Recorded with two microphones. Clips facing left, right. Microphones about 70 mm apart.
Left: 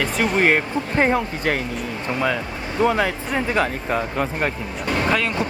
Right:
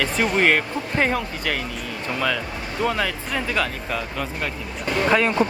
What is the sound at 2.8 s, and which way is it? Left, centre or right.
Speech, left.